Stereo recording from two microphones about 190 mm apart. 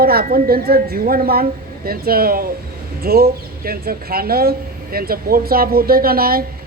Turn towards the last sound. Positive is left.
turn(degrees=-50)  # may be behind; listen again after turning